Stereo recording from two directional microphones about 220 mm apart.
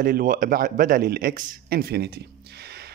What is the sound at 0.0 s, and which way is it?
A man's voice, 40° right (ahead or behind).